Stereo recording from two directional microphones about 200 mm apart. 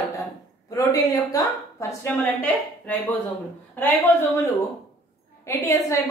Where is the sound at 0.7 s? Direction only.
20° left (ahead or behind).